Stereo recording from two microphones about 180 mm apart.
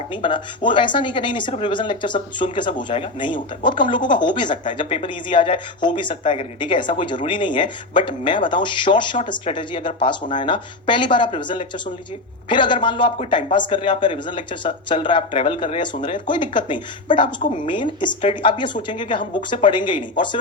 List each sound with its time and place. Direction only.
0.1 s speech: 25° left (ahead or behind)